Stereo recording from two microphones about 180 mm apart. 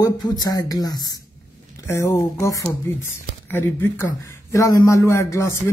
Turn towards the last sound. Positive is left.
turn(degrees=15)  # may be behind; listen again after turning